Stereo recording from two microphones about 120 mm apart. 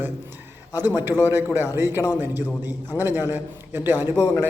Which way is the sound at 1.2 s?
20° right (ahead or behind).